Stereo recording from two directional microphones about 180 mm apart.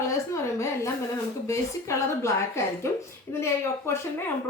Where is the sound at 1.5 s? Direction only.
15° left (ahead or behind).